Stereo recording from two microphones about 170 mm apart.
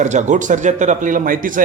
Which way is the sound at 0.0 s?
45° right (ahead or behind).